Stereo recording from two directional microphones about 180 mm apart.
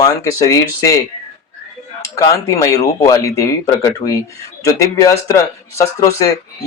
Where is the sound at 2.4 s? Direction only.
15° left (ahead or behind).